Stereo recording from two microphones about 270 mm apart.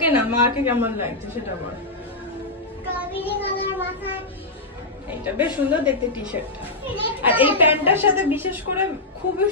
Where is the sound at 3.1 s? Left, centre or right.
Left.